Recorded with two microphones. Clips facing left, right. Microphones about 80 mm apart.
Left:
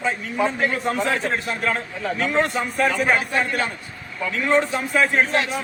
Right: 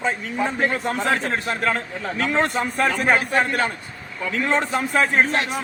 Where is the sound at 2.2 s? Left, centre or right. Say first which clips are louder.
Right 1 dB; right.